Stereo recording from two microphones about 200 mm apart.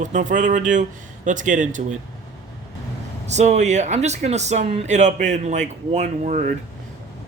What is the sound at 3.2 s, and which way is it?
Speech, 35° right (ahead or behind).